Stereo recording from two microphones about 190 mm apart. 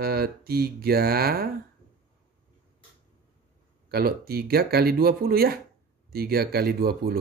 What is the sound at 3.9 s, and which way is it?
Mantra, 55° right (ahead or behind).